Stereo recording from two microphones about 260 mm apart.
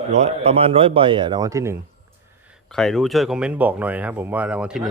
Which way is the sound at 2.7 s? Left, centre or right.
Centre.